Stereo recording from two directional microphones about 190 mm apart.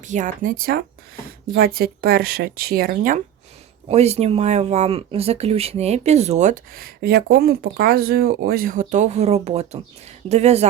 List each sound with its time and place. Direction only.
0.0 s speech: 40° right (ahead or behind)